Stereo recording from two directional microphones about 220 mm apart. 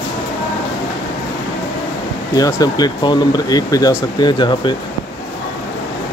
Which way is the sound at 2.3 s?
15° left (ahead or behind).